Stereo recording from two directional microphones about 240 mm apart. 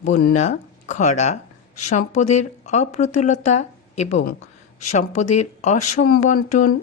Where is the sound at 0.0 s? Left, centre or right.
Left.